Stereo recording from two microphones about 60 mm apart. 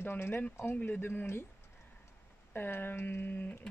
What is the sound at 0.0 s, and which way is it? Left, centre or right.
Speech, left.